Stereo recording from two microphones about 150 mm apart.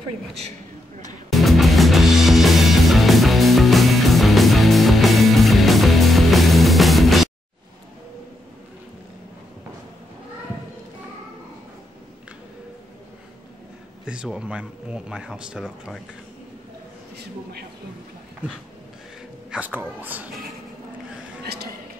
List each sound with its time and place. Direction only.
1.3 s music: centre (ahead or behind)
14.0 s speech: 5° right (ahead or behind)
17.2 s a man's voice: 90° right
19.5 s speech: 10° right (ahead or behind)